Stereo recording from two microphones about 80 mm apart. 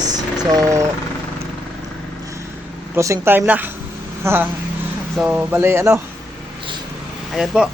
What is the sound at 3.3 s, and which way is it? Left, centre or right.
A woman's voice, right.